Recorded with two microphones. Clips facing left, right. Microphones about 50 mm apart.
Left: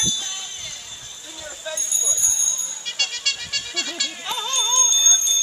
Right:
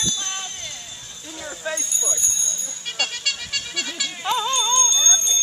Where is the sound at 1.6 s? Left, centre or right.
Right.